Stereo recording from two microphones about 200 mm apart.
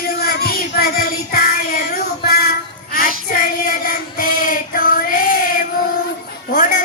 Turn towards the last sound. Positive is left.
turn(degrees=45)  # may be behind; listen again after turning